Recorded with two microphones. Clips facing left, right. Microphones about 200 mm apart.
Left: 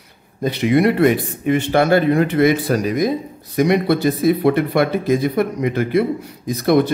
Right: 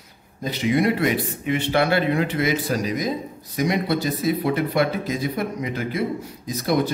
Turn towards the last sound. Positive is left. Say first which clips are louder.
# left 7 dB
turn(degrees=60)  # may be behind; listen again after turning